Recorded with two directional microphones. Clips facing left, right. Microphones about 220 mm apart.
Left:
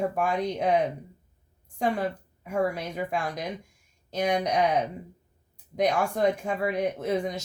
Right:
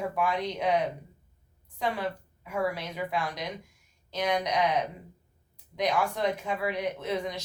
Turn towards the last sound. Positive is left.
turn(degrees=45)  # may be behind; listen again after turning